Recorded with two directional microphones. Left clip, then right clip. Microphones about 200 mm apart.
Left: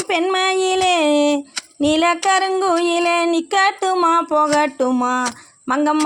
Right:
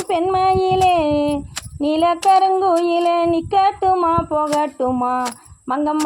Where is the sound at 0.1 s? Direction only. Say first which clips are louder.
Right 2 dB; 30° left (ahead or behind).